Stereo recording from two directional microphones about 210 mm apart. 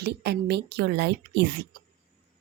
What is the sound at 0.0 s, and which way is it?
Speech, 50° right (ahead or behind).